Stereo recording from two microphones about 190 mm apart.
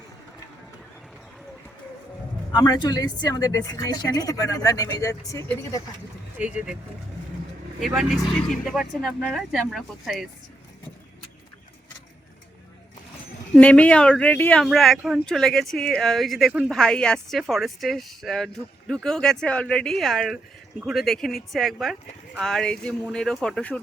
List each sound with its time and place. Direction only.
2.5 s speech: 25° left (ahead or behind)
6.4 s speech: 5° right (ahead or behind)
7.8 s speech: centre (ahead or behind)
13.6 s speech: 5° left (ahead or behind)